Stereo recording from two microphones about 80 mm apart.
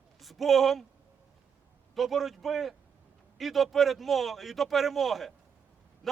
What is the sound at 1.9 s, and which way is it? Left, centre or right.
A man's voice, centre.